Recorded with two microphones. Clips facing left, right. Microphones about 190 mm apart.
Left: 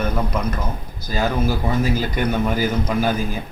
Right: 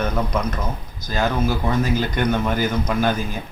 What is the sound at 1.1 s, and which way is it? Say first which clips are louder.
Speech: even; 10° left (ahead or behind).